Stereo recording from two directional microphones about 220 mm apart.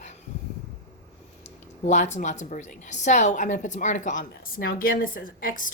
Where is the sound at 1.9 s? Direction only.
30° left (ahead or behind).